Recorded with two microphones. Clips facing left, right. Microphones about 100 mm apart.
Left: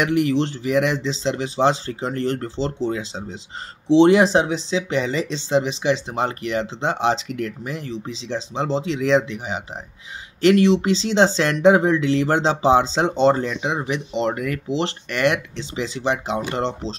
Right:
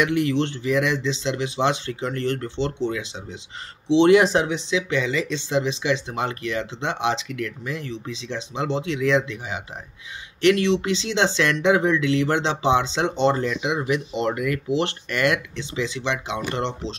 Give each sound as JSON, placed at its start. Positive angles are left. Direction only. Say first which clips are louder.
{"t": 0.0, "sound": "speech", "louder": "left 2 dB", "side_deg": 30}
{"t": 15.5, "sound": "speech", "louder": "even", "side_deg": 30}